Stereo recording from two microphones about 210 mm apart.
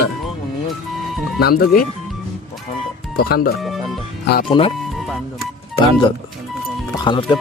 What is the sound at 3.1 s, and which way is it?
Speech, 45° left (ahead or behind).